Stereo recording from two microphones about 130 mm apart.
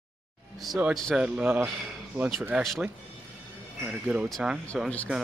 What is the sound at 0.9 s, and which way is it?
Speech, centre (ahead or behind).